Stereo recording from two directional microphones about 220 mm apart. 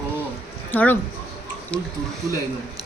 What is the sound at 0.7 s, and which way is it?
A woman's voice, 10° left (ahead or behind).